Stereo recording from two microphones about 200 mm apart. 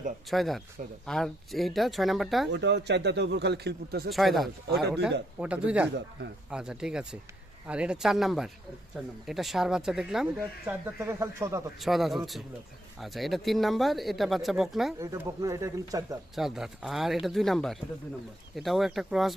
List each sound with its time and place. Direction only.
0.3 s speech: centre (ahead or behind)
2.5 s speech: 60° right (ahead or behind)
4.1 s speech: centre (ahead or behind)
10.7 s speech: 10° right (ahead or behind)
11.8 s speech: centre (ahead or behind)
14.9 s speech: 15° right (ahead or behind)
16.3 s speech: centre (ahead or behind)